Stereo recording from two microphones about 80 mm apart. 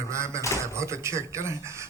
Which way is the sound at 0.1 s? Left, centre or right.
Right.